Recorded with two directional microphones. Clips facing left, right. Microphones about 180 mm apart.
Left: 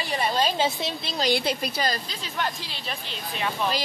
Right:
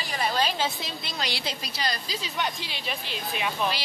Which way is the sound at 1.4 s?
55° left (ahead or behind).